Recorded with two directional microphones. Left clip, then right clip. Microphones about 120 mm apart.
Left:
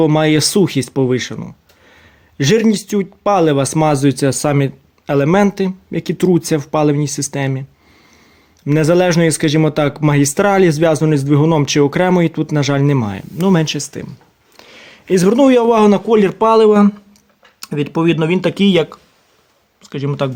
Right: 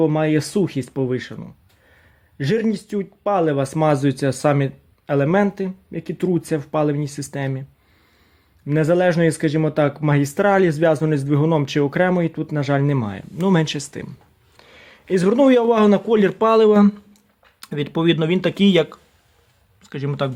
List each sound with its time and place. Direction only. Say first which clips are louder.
0.0 s speech: left 6 dB; 30° left (ahead or behind)
8.6 s speech: left 4 dB; 25° left (ahead or behind)
13.5 s speech: left 4 dB; centre (ahead or behind)
14.5 s a man's voice: left 7 dB; 15° left (ahead or behind)
16.0 s speech: left 5 dB; 5° left (ahead or behind)